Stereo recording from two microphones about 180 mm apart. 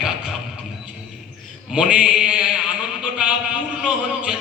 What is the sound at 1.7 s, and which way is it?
A man's voice, 5° right (ahead or behind).